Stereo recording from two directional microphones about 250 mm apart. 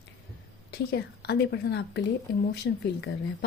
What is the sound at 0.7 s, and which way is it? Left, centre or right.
Speech, left.